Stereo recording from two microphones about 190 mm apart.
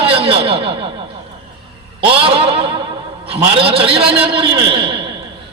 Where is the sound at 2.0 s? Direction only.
30° right (ahead or behind).